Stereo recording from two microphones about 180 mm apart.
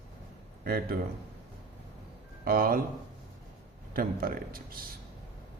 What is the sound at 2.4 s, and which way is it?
Speech, 55° right (ahead or behind).